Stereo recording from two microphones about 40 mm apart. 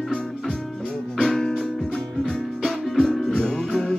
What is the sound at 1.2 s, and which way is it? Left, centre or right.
Music, centre.